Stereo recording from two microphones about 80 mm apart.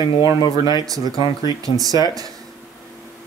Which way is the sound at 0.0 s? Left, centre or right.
Left.